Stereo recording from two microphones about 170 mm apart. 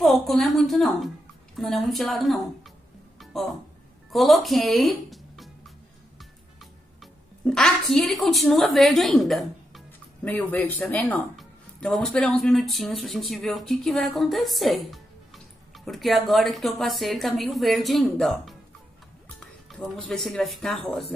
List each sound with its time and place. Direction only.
0.0 s a woman's voice: centre (ahead or behind)
4.1 s a woman's voice: centre (ahead or behind)
6.6 s speech: centre (ahead or behind)